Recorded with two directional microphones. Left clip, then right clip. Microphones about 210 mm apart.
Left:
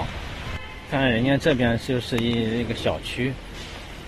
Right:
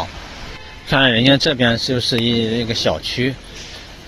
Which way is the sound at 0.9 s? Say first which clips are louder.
Right 9 dB; 30° right (ahead or behind).